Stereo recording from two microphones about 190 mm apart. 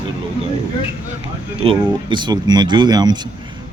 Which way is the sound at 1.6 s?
25° right (ahead or behind).